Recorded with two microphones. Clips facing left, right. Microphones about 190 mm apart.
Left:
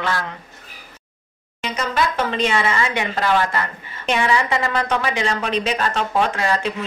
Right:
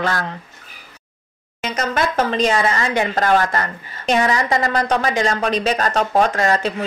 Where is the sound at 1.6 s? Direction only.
45° right (ahead or behind).